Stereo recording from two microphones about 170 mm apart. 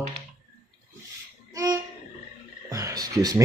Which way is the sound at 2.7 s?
20° right (ahead or behind).